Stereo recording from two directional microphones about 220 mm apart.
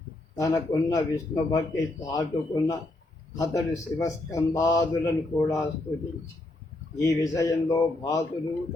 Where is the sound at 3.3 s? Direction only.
15° left (ahead or behind).